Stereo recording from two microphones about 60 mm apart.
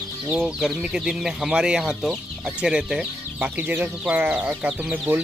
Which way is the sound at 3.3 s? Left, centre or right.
Right.